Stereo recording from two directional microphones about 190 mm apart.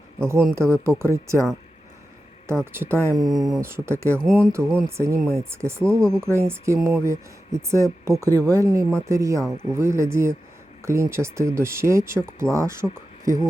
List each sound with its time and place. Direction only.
0.5 s speech: 15° right (ahead or behind)
2.7 s speech: 10° right (ahead or behind)
5.8 s speech: 5° left (ahead or behind)
6.1 s speech: 15° right (ahead or behind)